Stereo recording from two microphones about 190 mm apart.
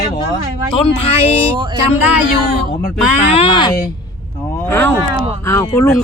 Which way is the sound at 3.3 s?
30° left (ahead or behind).